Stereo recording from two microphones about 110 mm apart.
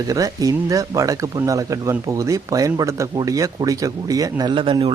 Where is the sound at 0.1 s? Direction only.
30° right (ahead or behind).